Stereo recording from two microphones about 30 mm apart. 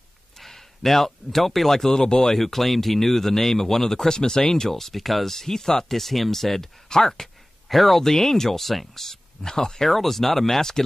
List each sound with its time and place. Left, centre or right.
0.4 s speech: centre
2.3 s speech: centre
5.9 s speech: centre
7.6 s speech: centre
8.0 s speech: centre
9.8 s speech: centre
10.6 s speech: centre